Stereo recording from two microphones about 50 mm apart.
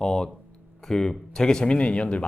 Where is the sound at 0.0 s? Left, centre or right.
Centre.